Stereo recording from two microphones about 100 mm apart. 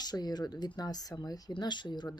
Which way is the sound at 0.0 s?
40° left (ahead or behind).